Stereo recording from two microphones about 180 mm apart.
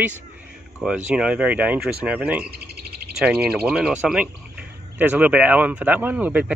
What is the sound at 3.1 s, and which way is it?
Speech, 5° right (ahead or behind).